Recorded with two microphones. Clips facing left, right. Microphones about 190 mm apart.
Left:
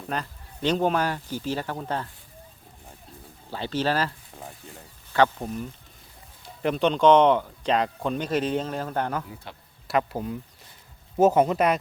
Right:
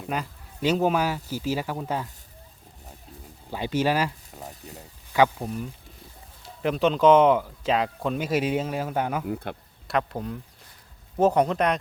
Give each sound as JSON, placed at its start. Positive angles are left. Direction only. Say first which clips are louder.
{"t": 0.1, "sound": "speech", "louder": "right 1 dB", "side_deg": -5}
{"t": 3.5, "sound": "speech", "louder": "right 2 dB", "side_deg": -10}
{"t": 9.2, "sound": "speech", "louder": "right 11 dB", "side_deg": -60}
{"t": 9.8, "sound": "speech", "louder": "left 1 dB", "side_deg": 5}